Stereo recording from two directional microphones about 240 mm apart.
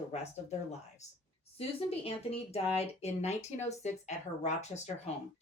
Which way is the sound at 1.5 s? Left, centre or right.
Left.